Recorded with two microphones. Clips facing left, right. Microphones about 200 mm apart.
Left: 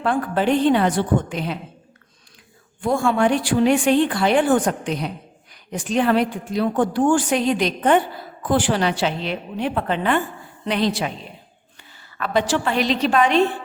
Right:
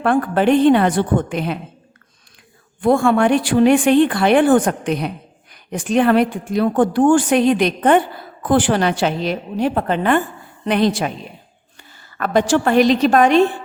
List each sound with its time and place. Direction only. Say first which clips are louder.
0.0 s speech: right 5 dB; 60° right (ahead or behind)
2.8 s a woman's voice: right 4 dB; 55° right (ahead or behind)